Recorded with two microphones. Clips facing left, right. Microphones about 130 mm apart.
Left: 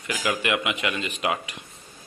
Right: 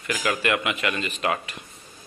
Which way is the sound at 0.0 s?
20° left (ahead or behind).